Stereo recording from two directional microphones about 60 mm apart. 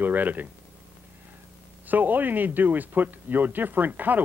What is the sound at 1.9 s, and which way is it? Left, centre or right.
Speech, right.